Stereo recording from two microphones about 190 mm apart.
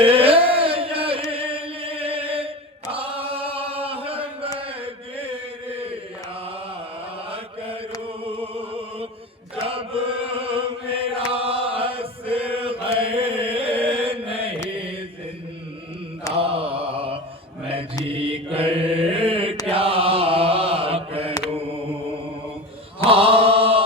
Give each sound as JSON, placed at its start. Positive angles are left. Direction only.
{"t": 0.0, "sound": "chant", "side_deg": -30}
{"t": 7.3, "sound": "mantra", "side_deg": -30}
{"t": 8.0, "sound": "music", "side_deg": -30}
{"t": 9.6, "sound": "chant", "side_deg": -30}
{"t": 16.3, "sound": "mantra", "side_deg": -30}
{"t": 23.0, "sound": "chant", "side_deg": -30}